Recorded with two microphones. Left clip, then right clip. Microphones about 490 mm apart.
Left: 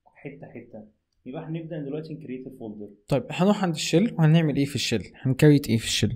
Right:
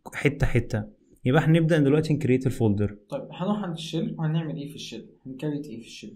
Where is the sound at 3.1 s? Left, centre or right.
Left.